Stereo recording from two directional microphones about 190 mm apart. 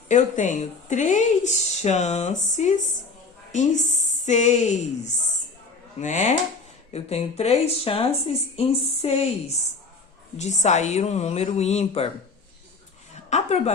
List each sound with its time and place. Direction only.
0.1 s speech: 40° left (ahead or behind)
13.3 s speech: 35° left (ahead or behind)